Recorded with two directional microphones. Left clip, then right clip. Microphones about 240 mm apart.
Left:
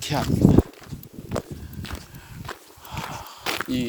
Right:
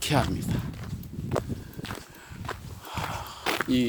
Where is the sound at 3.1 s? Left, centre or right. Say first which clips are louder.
Even; centre.